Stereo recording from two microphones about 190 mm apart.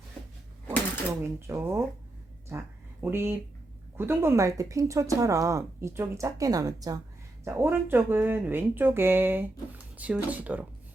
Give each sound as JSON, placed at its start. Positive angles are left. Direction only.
{"t": 1.2, "sound": "speech", "side_deg": -10}